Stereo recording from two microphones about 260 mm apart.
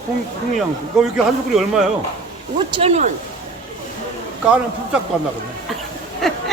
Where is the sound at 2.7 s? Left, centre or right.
Right.